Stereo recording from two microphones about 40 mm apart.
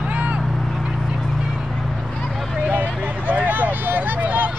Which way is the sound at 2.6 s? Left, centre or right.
Right.